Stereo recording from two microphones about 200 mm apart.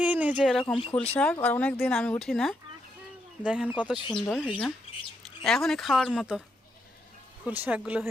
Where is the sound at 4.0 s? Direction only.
25° left (ahead or behind).